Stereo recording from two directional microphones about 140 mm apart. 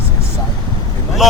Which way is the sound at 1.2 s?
Centre (ahead or behind).